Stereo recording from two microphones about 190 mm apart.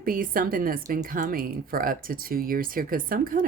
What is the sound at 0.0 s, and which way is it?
A woman's voice, 45° right (ahead or behind).